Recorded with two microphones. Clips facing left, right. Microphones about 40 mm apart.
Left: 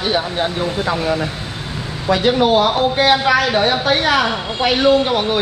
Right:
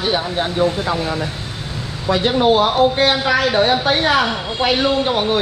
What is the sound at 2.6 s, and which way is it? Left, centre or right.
A woman's voice, centre.